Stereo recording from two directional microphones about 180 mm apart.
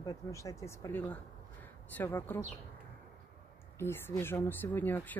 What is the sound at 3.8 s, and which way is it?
Speech, 15° left (ahead or behind).